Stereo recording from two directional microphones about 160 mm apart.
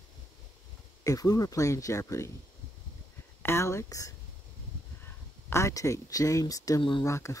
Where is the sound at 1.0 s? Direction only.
20° left (ahead or behind).